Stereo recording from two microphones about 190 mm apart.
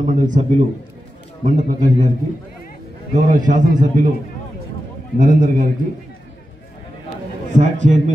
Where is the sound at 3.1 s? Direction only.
45° right (ahead or behind).